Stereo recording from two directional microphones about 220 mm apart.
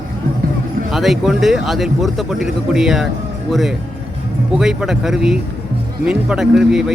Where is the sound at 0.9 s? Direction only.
Centre (ahead or behind).